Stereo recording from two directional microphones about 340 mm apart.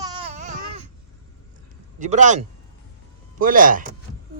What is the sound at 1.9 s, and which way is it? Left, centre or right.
A child's voice, right.